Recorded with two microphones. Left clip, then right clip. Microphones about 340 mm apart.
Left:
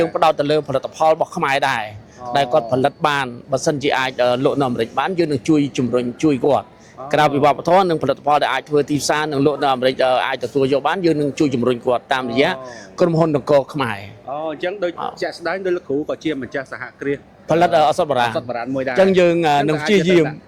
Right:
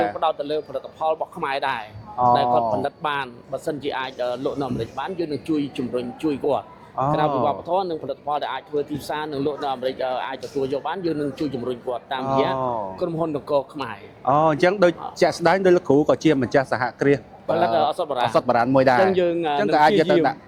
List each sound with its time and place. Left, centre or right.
0.0 s a man's voice: left
7.1 s a man's voice: left
14.3 s speech: right
17.5 s a man's voice: left
18.3 s speech: right
19.0 s a man's voice: left